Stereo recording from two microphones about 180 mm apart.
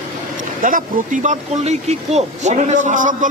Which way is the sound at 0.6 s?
50° right (ahead or behind).